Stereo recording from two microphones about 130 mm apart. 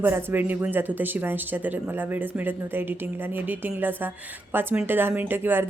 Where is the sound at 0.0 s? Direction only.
15° right (ahead or behind).